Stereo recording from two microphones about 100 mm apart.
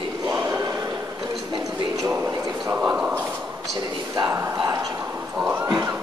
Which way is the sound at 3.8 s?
35° right (ahead or behind).